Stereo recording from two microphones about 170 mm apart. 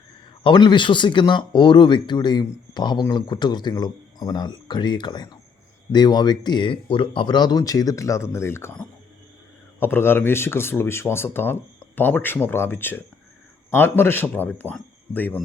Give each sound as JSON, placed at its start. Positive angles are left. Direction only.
{"t": 0.4, "sound": "speech", "side_deg": 25}